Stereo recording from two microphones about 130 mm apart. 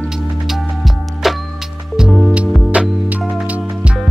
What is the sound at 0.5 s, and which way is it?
Music, centre (ahead or behind).